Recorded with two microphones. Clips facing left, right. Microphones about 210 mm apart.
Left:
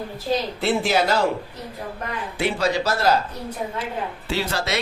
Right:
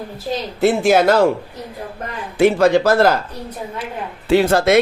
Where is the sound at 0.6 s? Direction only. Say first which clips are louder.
Right 10 dB; 45° right (ahead or behind).